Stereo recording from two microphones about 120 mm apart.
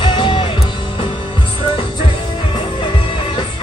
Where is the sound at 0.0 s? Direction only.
40° left (ahead or behind).